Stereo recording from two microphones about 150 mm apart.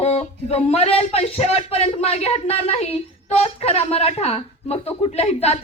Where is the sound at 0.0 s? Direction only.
45° left (ahead or behind).